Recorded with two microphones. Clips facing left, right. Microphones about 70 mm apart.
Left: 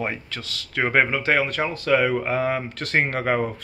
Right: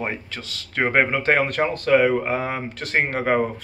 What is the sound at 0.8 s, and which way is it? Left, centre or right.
Speech, centre.